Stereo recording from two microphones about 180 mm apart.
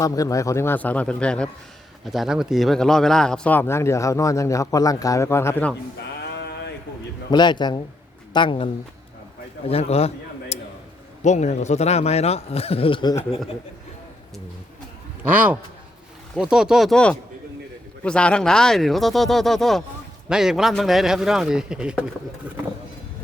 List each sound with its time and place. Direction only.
0.0 s speech: 20° left (ahead or behind)
6.2 s a sound: 70° left (ahead or behind)
7.3 s a man's voice: 25° left (ahead or behind)
10.5 s a sound: 35° left (ahead or behind)
11.2 s a man's voice: 40° left (ahead or behind); by 13.4 s 25° left (ahead or behind)
15.2 s a man's voice: 10° right (ahead or behind)